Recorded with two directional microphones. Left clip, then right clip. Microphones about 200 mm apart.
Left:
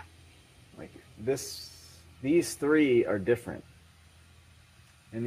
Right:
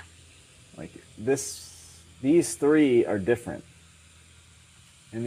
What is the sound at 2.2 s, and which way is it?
Speech, 30° right (ahead or behind).